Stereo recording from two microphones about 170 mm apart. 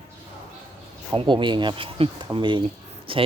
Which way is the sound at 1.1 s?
30° right (ahead or behind).